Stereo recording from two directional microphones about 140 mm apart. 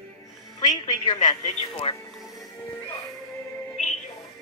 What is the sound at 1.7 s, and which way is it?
Speech, 45° left (ahead or behind).